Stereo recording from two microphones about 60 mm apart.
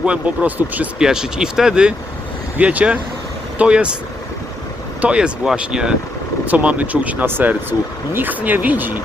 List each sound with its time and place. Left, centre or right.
0.0 s speech: right
0.9 s speech: centre
4.9 s speech: centre
6.5 s speech: right
7.3 s speech: right